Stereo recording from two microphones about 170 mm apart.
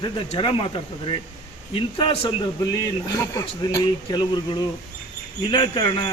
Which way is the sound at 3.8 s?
30° left (ahead or behind).